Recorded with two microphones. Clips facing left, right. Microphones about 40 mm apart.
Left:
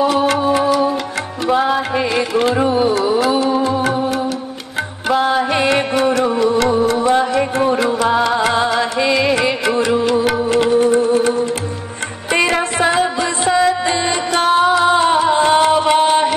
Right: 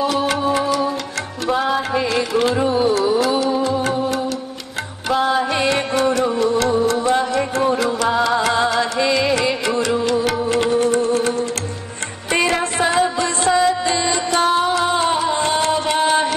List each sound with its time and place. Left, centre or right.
0.0 s music: centre
3.9 s music: centre
9.7 s music: left
13.2 s music: left